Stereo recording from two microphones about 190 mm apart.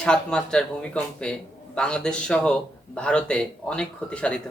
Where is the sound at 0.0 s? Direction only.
5° left (ahead or behind).